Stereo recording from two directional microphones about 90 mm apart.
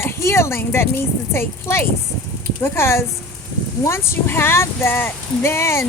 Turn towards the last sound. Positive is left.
turn(degrees=30)  # may be behind; listen again after turning